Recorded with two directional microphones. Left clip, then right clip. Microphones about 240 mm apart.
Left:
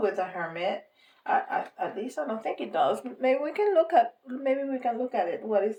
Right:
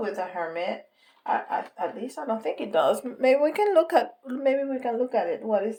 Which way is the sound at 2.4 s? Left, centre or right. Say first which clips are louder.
Right 3 dB; right.